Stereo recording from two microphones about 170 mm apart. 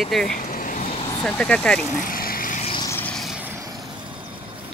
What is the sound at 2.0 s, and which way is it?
Vehicle, 55° left (ahead or behind).